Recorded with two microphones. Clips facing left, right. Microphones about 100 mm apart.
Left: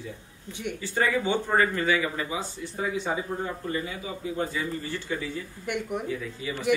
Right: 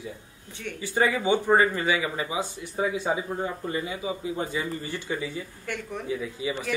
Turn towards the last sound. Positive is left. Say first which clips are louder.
# right 3 dB
turn(degrees=-15)  # may be behind; listen again after turning